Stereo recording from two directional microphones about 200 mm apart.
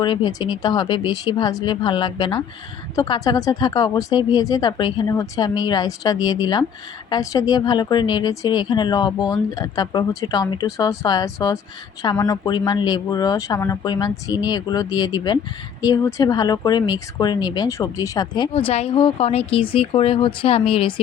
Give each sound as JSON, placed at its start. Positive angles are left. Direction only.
{"t": 0.0, "sound": "speech", "side_deg": 25}